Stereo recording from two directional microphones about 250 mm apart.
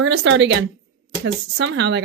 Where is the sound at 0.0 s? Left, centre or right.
Right.